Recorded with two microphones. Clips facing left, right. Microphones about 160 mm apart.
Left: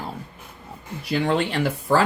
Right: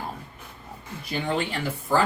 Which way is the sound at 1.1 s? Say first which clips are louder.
Left 5 dB; 80° left.